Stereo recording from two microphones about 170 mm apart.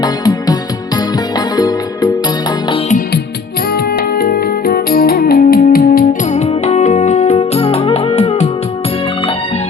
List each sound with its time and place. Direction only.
0.0 s music: 20° left (ahead or behind)
1.5 s music: 25° left (ahead or behind)
4.2 s music: 60° left (ahead or behind)
6.4 s music: 40° left (ahead or behind)